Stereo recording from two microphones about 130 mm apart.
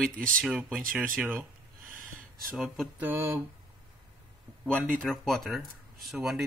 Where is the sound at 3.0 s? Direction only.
15° right (ahead or behind).